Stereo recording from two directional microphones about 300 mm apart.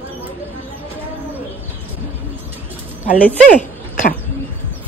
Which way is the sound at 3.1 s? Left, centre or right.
Centre.